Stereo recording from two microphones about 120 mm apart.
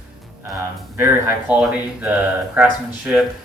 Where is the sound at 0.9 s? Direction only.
15° right (ahead or behind).